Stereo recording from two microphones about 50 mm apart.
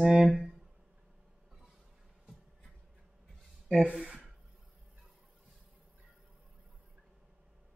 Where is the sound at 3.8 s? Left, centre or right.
Centre.